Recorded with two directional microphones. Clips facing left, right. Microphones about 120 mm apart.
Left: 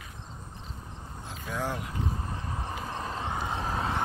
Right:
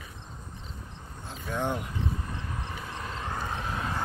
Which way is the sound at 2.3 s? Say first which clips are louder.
Left 2 dB; 30° left (ahead or behind).